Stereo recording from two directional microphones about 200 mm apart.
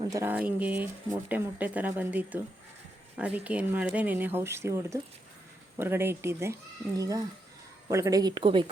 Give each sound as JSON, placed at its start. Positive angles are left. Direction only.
{"t": 0.0, "sound": "speech", "side_deg": -15}